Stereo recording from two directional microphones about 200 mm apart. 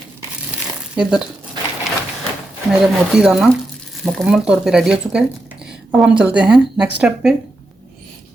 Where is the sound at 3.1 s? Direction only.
5° right (ahead or behind).